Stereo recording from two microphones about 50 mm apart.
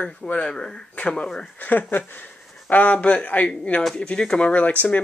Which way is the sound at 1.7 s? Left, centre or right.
Left.